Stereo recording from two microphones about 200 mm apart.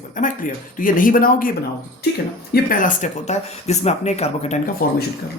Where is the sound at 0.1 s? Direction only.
40° left (ahead or behind).